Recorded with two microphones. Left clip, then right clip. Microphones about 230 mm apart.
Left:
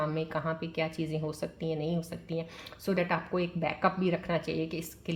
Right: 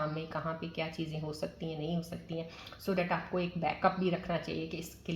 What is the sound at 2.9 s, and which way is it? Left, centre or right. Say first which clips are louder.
A woman's voice: left 3 dB; left.